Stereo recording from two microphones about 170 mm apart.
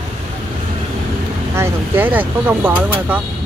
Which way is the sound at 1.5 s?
15° right (ahead or behind).